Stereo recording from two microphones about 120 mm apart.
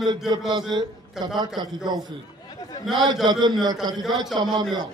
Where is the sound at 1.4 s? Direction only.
35° right (ahead or behind).